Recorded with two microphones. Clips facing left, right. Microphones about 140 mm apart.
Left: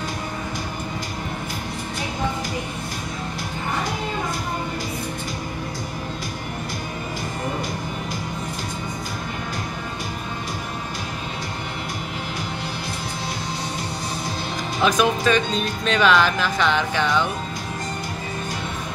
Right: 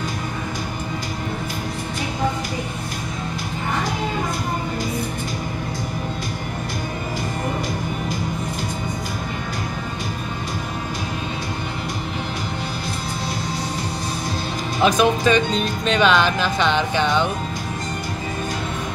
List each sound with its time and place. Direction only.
14.8 s speech: 20° right (ahead or behind)